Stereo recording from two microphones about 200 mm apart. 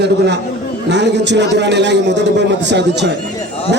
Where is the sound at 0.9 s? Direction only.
60° right (ahead or behind).